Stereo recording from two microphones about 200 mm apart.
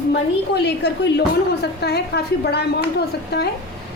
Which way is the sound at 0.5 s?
55° left (ahead or behind).